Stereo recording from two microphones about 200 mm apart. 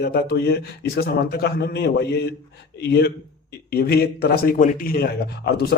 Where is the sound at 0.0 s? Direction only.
50° left (ahead or behind).